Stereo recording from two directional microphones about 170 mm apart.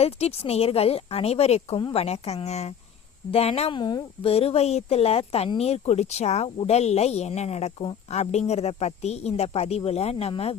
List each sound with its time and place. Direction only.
0.0 s speech: 35° left (ahead or behind)